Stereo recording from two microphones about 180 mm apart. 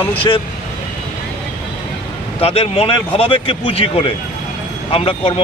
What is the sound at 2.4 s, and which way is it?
Speech, 35° left (ahead or behind).